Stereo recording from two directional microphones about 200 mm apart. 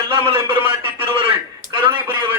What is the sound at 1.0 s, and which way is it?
Speech, 25° right (ahead or behind).